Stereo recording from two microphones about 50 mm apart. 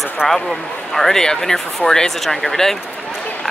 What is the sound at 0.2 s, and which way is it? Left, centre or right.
Speech, centre.